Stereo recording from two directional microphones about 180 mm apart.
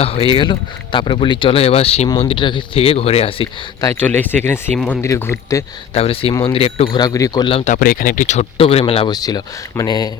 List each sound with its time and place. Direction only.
0.0 s a man's voice: 30° left (ahead or behind)
3.8 s speech: 15° left (ahead or behind)
5.9 s a man's voice: 30° left (ahead or behind)
7.0 s a man's voice: 20° left (ahead or behind)